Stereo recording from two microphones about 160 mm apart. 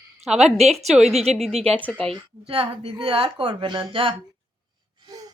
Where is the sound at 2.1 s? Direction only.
35° right (ahead or behind).